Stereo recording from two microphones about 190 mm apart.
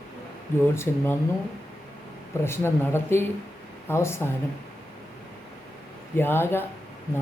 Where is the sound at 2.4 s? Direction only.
10° left (ahead or behind).